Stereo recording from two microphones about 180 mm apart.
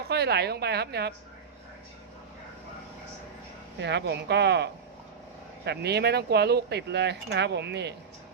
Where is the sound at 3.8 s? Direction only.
70° right (ahead or behind).